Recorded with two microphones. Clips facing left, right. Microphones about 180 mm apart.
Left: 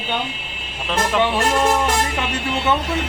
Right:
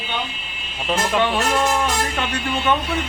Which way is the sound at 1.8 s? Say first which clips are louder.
Left 2 dB; 20° left (ahead or behind).